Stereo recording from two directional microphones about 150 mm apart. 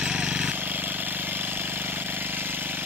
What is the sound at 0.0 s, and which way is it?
Vehicle, 5° right (ahead or behind).